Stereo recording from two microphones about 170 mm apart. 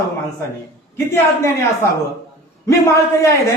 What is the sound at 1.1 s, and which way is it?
A man's voice, 15° left (ahead or behind).